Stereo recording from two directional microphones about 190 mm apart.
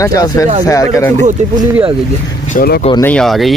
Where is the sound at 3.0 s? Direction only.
5° left (ahead or behind).